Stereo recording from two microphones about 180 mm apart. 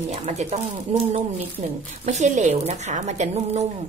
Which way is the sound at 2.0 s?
40° right (ahead or behind).